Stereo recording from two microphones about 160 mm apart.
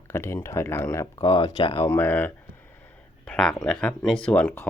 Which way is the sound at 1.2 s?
30° left (ahead or behind).